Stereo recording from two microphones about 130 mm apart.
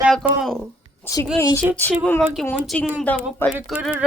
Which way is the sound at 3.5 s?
5° right (ahead or behind).